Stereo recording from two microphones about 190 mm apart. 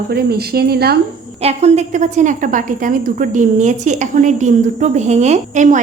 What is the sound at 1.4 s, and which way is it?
A woman's voice, 35° right (ahead or behind).